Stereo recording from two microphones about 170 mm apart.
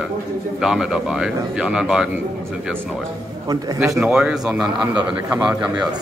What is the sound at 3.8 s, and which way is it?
A man's voice, 5° right (ahead or behind).